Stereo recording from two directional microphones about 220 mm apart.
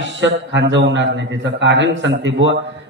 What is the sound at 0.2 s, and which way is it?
A man's voice, 55° right (ahead or behind).